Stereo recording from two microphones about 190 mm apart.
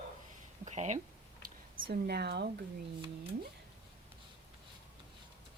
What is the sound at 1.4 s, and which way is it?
Speech, 55° right (ahead or behind).